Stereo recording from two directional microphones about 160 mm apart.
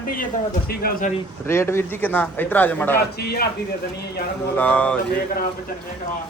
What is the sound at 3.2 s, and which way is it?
Speech, 70° left (ahead or behind).